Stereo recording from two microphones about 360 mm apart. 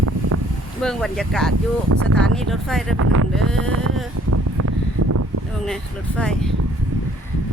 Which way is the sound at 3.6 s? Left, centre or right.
Right.